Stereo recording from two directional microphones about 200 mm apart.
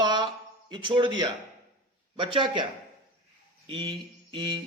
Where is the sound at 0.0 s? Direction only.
20° right (ahead or behind).